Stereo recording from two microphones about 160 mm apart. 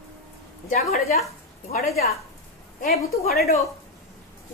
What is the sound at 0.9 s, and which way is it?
Speech, 45° left (ahead or behind).